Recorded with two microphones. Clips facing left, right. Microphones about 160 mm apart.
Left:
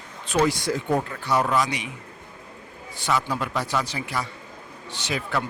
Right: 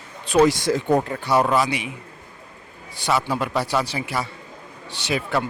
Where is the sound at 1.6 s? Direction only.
10° right (ahead or behind).